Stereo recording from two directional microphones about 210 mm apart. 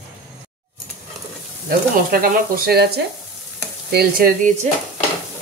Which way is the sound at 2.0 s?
45° right (ahead or behind).